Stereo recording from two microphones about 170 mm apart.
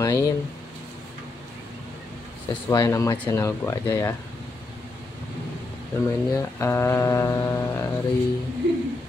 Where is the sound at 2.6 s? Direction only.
15° left (ahead or behind).